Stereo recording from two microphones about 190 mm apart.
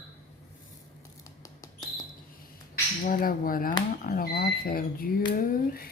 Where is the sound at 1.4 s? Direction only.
20° left (ahead or behind).